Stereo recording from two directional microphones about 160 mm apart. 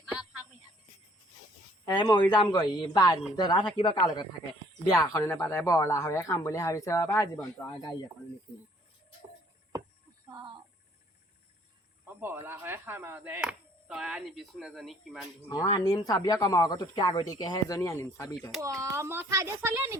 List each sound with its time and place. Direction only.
0.0 s music: 5° right (ahead or behind)
1.8 s speech: 25° left (ahead or behind)
10.3 s a sound: 30° right (ahead or behind)
12.0 s speech: 15° right (ahead or behind)
15.4 s speech: 25° left (ahead or behind)
18.6 s speech: 20° right (ahead or behind)